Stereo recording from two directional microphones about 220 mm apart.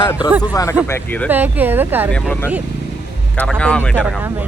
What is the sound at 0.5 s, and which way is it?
Speech, 15° left (ahead or behind).